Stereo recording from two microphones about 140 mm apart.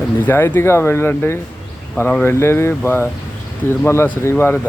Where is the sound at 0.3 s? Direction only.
15° left (ahead or behind).